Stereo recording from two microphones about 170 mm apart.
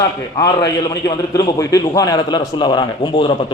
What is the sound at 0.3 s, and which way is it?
A man's voice, 20° left (ahead or behind).